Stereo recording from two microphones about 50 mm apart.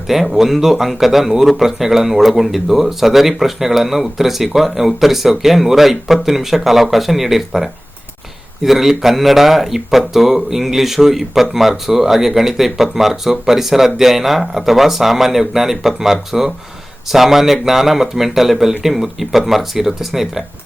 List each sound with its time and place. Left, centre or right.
0.1 s speech: centre